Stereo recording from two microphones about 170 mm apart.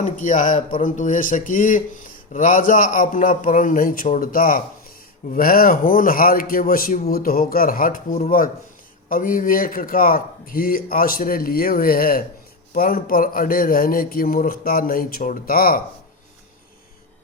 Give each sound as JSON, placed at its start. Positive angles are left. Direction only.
{"t": 0.0, "sound": "speech", "side_deg": 50}